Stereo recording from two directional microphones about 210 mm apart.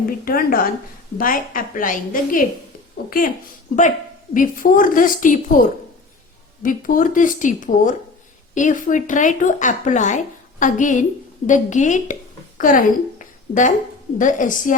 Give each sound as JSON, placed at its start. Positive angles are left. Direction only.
{"t": 0.3, "sound": "a woman's voice", "side_deg": 45}
{"t": 4.4, "sound": "a woman's voice", "side_deg": 40}